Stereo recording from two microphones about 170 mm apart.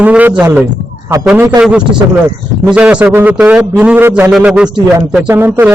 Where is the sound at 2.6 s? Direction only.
5° right (ahead or behind).